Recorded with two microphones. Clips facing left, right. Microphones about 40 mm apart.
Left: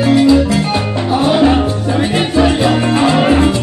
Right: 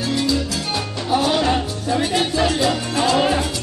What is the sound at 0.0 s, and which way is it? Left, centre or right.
Music, left.